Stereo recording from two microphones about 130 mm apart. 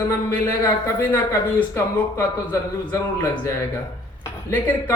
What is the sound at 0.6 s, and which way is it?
A woman's voice, 15° left (ahead or behind).